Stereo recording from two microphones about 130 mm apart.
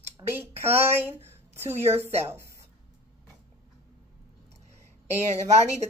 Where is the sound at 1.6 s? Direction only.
20° right (ahead or behind).